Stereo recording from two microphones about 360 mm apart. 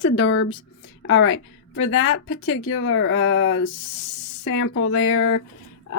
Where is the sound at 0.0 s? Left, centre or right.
Left.